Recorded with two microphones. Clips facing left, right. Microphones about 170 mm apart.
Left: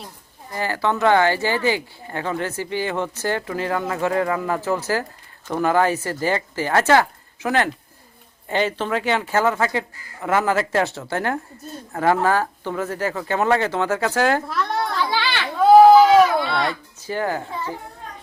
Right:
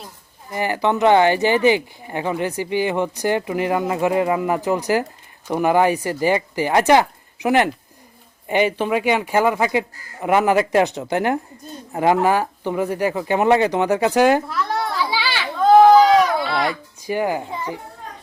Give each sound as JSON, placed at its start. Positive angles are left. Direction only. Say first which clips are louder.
{"t": 0.5, "sound": "speech", "louder": "right 3 dB", "side_deg": -15}
{"t": 14.4, "sound": "children playing", "louder": "even", "side_deg": 0}
{"t": 15.5, "sound": "a sound", "louder": "left 1 dB", "side_deg": 5}
{"t": 17.0, "sound": "a child's voice", "louder": "right 3 dB", "side_deg": -15}